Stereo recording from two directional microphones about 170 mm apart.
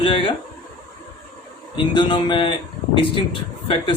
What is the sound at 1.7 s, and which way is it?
A man's voice, 25° left (ahead or behind).